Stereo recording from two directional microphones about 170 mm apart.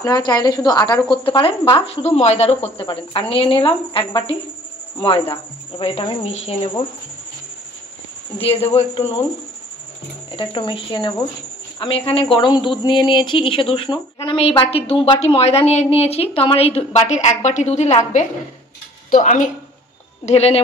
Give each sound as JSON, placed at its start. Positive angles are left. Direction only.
{"t": 0.0, "sound": "a man's voice", "side_deg": 20}
{"t": 8.4, "sound": "a man's voice", "side_deg": 35}
{"t": 10.3, "sound": "a man's voice", "side_deg": 30}
{"t": 20.2, "sound": "a man's voice", "side_deg": 40}